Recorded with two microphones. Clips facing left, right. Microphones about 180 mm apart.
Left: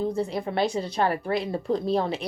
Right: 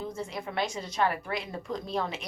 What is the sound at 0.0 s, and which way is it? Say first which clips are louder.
Speech: left 9 dB; 35° left (ahead or behind).